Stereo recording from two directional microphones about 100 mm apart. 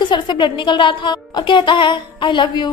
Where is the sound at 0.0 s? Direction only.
50° left (ahead or behind).